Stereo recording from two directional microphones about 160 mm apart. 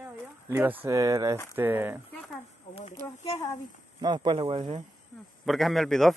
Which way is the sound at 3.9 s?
30° right (ahead or behind).